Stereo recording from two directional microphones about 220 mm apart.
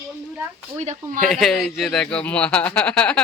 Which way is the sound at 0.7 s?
30° right (ahead or behind).